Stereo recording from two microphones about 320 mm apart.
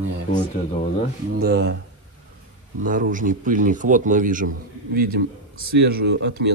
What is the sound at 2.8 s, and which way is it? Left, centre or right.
A man's voice, right.